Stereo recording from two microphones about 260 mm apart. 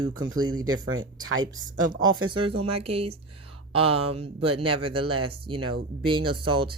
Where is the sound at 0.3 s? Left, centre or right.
Centre.